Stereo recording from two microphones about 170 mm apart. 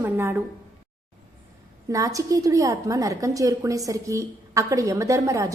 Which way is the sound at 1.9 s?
20° right (ahead or behind).